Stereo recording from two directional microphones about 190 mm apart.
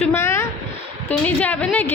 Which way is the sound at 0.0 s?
15° left (ahead or behind).